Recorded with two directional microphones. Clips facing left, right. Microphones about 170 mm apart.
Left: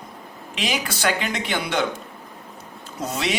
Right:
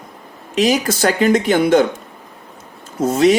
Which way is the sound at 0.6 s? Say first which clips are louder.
Right 11 dB; 40° right (ahead or behind).